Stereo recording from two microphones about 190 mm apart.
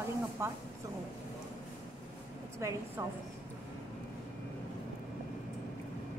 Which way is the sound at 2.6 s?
15° right (ahead or behind).